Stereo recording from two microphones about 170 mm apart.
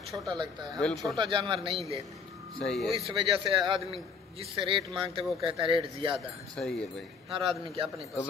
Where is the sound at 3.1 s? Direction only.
30° right (ahead or behind).